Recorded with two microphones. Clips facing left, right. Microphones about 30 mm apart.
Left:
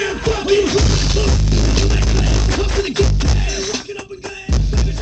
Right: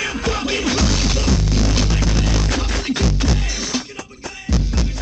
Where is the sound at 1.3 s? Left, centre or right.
Centre.